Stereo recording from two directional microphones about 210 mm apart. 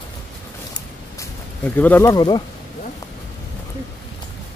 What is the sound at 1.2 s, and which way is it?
Speech, 10° left (ahead or behind).